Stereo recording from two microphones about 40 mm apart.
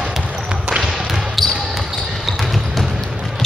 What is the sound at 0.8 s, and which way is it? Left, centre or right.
Basketball bounce, centre.